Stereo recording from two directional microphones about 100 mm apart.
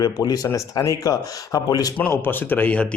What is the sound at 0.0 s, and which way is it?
Speech, 40° left (ahead or behind).